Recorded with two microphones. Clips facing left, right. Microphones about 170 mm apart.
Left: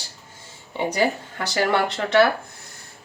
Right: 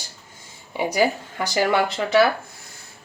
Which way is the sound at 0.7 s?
10° right (ahead or behind).